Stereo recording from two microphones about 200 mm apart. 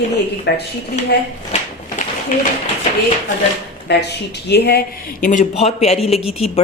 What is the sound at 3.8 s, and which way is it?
Speech, 55° left (ahead or behind).